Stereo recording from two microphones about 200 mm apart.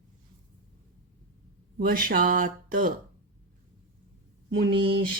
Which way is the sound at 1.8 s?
45° right (ahead or behind).